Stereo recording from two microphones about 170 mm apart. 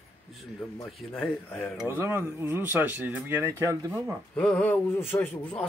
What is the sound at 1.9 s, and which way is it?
Speech, 15° right (ahead or behind).